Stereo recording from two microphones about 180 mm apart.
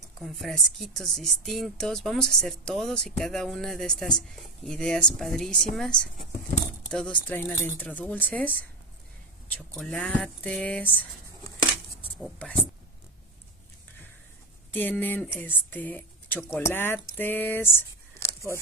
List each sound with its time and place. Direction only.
0.2 s speech: centre (ahead or behind)
12.2 s speech: 5° left (ahead or behind)
14.7 s speech: 10° left (ahead or behind)